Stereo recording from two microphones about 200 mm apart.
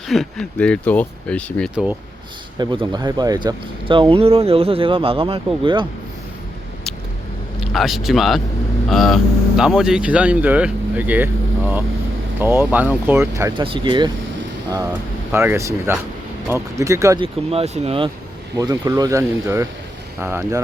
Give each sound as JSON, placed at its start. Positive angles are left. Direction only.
{"t": 0.1, "sound": "speech", "side_deg": 0}
{"t": 1.7, "sound": "speech", "side_deg": -5}
{"t": 2.6, "sound": "speech", "side_deg": -20}
{"t": 7.7, "sound": "speech", "side_deg": 0}
{"t": 13.5, "sound": "speech", "side_deg": -25}
{"t": 15.3, "sound": "speech", "side_deg": -10}
{"t": 17.5, "sound": "speech", "side_deg": -30}